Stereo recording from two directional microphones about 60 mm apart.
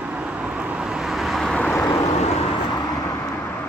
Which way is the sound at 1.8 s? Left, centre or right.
Left.